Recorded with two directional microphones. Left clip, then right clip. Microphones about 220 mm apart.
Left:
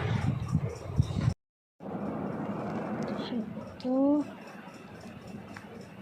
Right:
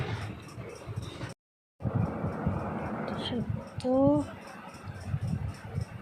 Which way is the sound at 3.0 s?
40° right (ahead or behind).